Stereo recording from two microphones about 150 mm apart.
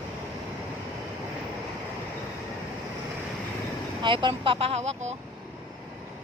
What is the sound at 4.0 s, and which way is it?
Speech, 30° right (ahead or behind).